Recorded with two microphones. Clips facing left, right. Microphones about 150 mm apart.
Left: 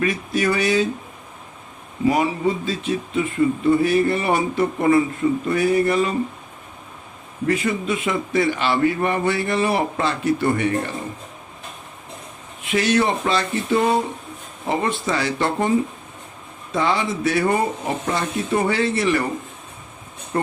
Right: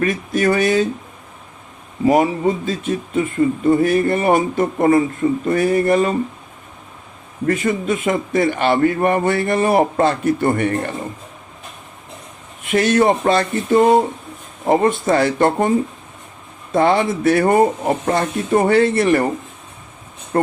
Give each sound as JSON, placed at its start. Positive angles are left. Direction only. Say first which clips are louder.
{"t": 0.0, "sound": "a man's voice", "louder": "right 3 dB", "side_deg": -45}
{"t": 2.0, "sound": "a man's voice", "louder": "right 4 dB", "side_deg": -45}
{"t": 7.4, "sound": "a man's voice", "louder": "right 3 dB", "side_deg": -45}
{"t": 12.6, "sound": "a man's voice", "louder": "right 5 dB", "side_deg": -50}
{"t": 16.7, "sound": "a man's voice", "louder": "right 6 dB", "side_deg": -55}
{"t": 20.3, "sound": "a man's voice", "louder": "right 5 dB", "side_deg": -45}